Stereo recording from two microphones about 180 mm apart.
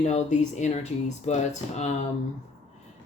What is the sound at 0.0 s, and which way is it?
Speech, 40° left (ahead or behind).